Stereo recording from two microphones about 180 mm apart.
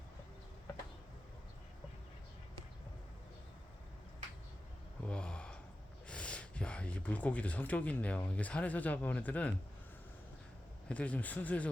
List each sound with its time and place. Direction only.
5.0 s gasp: 5° left (ahead or behind)
6.1 s speech: 5° left (ahead or behind)
10.8 s speech: 10° left (ahead or behind)